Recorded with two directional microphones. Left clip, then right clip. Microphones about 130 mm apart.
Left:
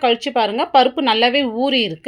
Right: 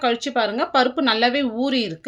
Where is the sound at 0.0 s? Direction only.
20° left (ahead or behind).